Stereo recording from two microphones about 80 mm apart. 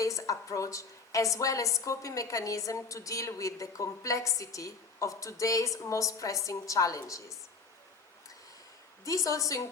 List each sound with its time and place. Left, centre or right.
0.0 s a woman's voice: left
9.0 s a woman's voice: left